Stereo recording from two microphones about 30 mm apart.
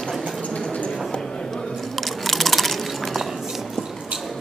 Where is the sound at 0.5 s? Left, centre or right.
Left.